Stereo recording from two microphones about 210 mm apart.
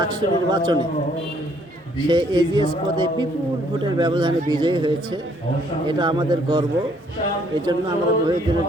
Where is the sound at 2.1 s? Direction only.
20° right (ahead or behind).